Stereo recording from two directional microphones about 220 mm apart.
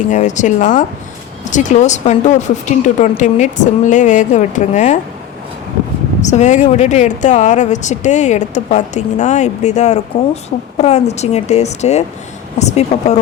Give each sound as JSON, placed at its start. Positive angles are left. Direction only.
{"t": 0.1, "sound": "speech", "side_deg": 35}
{"t": 6.2, "sound": "speech", "side_deg": 35}